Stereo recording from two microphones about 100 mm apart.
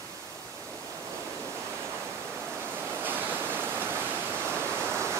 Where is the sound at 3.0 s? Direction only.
20° right (ahead or behind).